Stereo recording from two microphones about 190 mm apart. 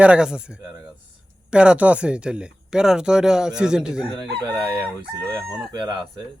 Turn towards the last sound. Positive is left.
turn(degrees=-25)  # may be behind; listen again after turning